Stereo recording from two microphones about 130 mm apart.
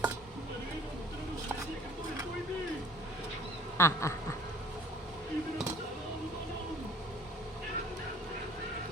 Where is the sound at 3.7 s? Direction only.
20° left (ahead or behind).